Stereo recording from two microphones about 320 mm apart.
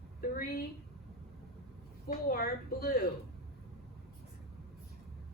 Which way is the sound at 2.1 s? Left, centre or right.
Left.